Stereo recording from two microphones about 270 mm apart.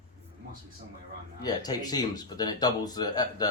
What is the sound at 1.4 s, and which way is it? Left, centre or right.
Speech, centre.